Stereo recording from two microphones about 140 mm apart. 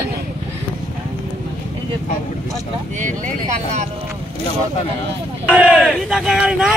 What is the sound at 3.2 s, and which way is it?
Vehicle, 55° right (ahead or behind).